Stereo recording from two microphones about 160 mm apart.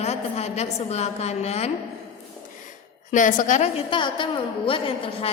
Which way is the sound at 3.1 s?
55° left (ahead or behind).